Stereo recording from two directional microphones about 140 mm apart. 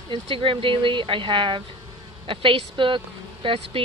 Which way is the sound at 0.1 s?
40° right (ahead or behind).